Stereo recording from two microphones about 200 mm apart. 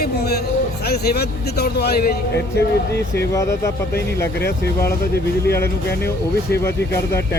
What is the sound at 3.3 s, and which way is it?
Speech, 15° left (ahead or behind).